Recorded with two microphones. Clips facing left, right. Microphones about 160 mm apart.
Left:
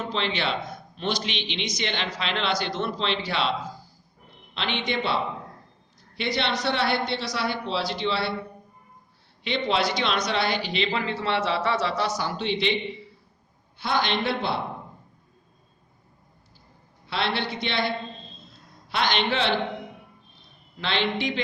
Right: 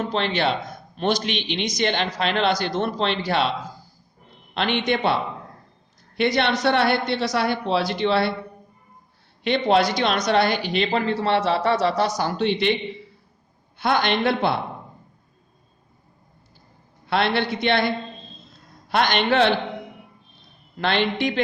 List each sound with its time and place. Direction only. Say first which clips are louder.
0.1 s speech: right 3 dB; 45° right (ahead or behind)
4.5 s speech: right 6 dB; 50° right (ahead or behind)
6.1 s speech: right 6 dB; 50° right (ahead or behind)
9.4 s speech: right 6 dB; 50° right (ahead or behind)
13.7 s a man's voice: right 4 dB; 55° right (ahead or behind)
17.1 s a man's voice: right 6 dB; 55° right (ahead or behind)
20.7 s speech: right 4 dB; 50° right (ahead or behind)